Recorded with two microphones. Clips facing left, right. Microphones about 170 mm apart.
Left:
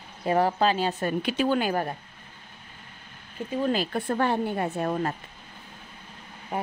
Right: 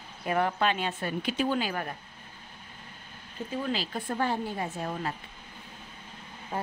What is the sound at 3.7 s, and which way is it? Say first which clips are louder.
A woman's voice: left 5 dB; 60° left (ahead or behind).